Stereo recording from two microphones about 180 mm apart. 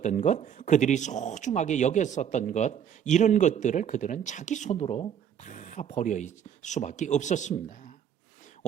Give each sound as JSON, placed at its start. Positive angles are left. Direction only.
{"t": 0.0, "sound": "speech", "side_deg": 40}